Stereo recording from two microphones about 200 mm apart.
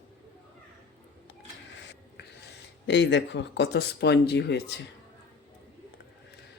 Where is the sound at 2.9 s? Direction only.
60° left (ahead or behind).